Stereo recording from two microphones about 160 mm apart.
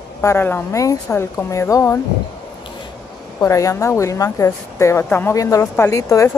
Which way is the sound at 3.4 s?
20° left (ahead or behind).